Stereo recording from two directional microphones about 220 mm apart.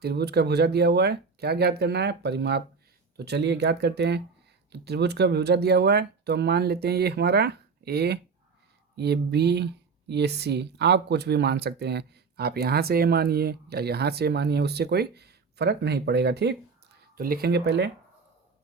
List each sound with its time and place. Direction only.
0.0 s speech: 45° right (ahead or behind)